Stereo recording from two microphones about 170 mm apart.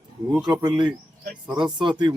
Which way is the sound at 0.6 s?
25° right (ahead or behind).